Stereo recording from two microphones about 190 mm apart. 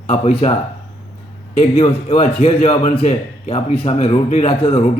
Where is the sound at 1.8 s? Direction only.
30° left (ahead or behind).